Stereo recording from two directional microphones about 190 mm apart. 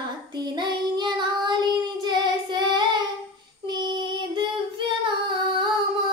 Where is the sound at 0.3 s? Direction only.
20° right (ahead or behind).